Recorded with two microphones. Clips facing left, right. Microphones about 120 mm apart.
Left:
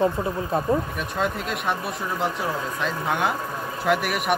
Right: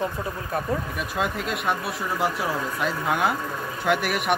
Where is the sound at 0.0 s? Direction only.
25° left (ahead or behind).